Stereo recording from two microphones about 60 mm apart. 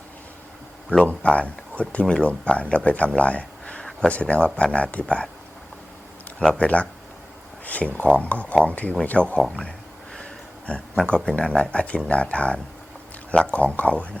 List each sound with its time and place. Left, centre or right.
0.9 s speech: left
6.6 s speech: left
9.4 s speech: centre